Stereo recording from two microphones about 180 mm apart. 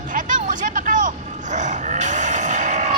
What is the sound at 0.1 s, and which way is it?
Grunt, 45° right (ahead or behind).